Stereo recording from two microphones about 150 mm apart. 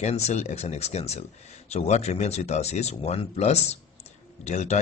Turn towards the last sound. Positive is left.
turn(degrees=50)  # may be behind; listen again after turning